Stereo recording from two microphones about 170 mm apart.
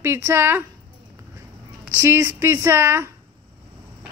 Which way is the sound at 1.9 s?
15° right (ahead or behind).